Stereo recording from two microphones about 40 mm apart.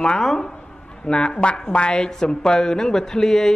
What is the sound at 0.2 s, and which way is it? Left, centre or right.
Speech, centre.